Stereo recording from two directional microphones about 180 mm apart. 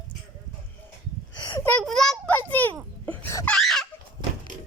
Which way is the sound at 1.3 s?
25° left (ahead or behind).